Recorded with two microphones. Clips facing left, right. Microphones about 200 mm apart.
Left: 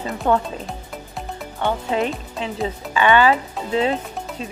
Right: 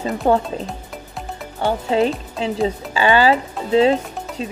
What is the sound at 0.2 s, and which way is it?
Speech, 35° right (ahead or behind).